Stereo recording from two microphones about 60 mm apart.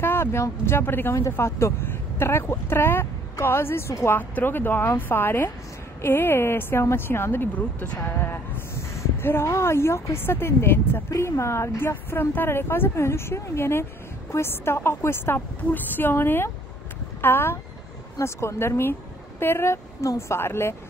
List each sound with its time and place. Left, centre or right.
0.0 s speech: left
4.1 s speech: left
11.1 s speech: left
18.2 s speech: left